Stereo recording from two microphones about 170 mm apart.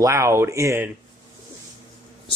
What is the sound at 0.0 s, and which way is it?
Speech, 15° right (ahead or behind).